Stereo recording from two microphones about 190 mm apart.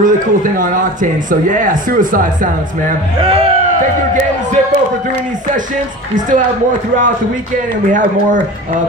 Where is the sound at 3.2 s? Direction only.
30° right (ahead or behind).